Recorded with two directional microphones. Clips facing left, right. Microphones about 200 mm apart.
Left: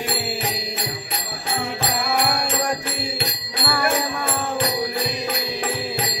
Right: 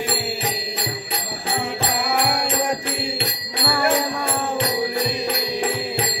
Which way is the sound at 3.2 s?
25° right (ahead or behind).